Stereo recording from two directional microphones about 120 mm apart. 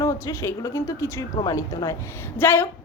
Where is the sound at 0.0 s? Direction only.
25° left (ahead or behind).